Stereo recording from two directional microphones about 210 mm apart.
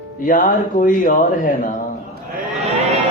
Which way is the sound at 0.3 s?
40° left (ahead or behind).